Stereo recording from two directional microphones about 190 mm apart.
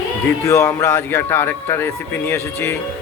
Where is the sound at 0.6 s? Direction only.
10° left (ahead or behind).